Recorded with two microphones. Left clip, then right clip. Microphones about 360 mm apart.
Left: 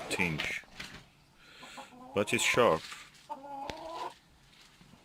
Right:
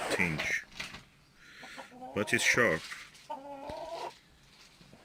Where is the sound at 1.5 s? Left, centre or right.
Centre.